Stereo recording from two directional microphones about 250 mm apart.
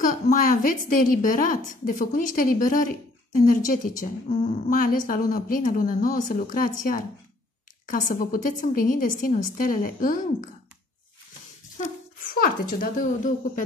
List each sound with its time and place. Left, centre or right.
0.0 s a woman's voice: left
11.8 s speech: left